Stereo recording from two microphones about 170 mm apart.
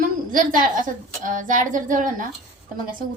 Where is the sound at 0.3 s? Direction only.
55° right (ahead or behind).